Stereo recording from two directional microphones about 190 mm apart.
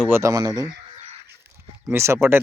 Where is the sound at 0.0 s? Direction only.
15° right (ahead or behind).